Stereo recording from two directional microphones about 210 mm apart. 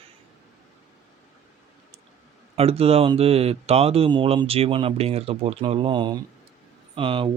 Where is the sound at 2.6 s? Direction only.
30° right (ahead or behind).